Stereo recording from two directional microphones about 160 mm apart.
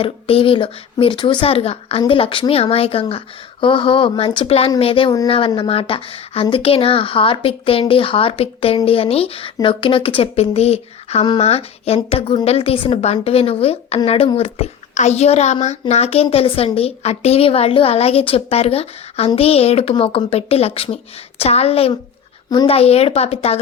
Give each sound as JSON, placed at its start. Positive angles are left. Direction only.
{"t": 0.0, "sound": "a woman's voice", "side_deg": 35}
{"t": 22.4, "sound": "speech", "side_deg": 25}
{"t": 22.7, "sound": "a woman's voice", "side_deg": 40}